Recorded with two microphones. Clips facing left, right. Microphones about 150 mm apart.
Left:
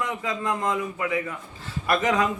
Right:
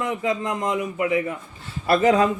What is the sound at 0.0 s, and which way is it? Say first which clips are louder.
A man's voice: right 4 dB; 25° right (ahead or behind).